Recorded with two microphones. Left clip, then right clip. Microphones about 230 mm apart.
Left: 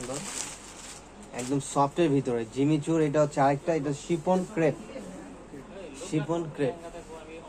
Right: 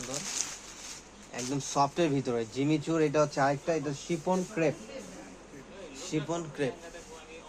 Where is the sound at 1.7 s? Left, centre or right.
Right.